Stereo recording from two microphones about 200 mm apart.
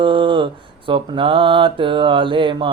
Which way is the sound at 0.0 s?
25° right (ahead or behind).